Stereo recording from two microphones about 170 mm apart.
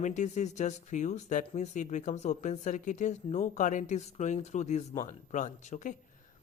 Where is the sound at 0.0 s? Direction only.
45° left (ahead or behind).